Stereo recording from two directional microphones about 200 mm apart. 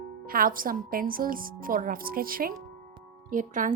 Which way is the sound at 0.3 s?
45° right (ahead or behind).